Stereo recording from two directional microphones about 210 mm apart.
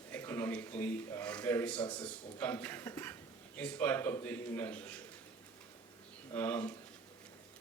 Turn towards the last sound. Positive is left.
turn(degrees=10)  # may be behind; listen again after turning